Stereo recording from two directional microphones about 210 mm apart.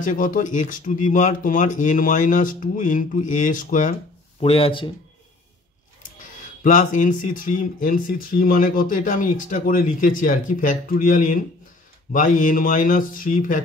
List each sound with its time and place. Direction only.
0.0 s speech: 40° left (ahead or behind)
4.4 s speech: 25° left (ahead or behind)
6.1 s speech: 35° left (ahead or behind)